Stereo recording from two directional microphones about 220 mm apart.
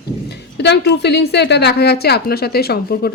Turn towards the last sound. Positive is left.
turn(degrees=45)  # may be behind; listen again after turning